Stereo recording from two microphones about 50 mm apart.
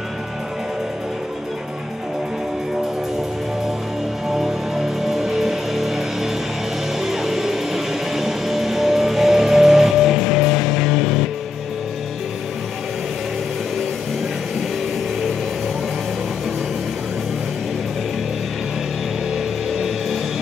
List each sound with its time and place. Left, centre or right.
4.3 s music: centre
7.0 s music: centre
19.3 s music: centre